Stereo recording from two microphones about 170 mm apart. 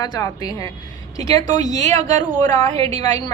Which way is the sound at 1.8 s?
45° right (ahead or behind).